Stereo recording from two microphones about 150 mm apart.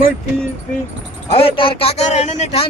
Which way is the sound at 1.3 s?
40° left (ahead or behind).